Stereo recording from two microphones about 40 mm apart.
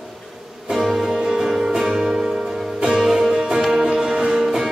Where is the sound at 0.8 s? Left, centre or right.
Centre.